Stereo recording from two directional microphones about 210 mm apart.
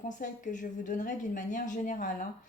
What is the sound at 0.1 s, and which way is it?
Speech, 35° left (ahead or behind).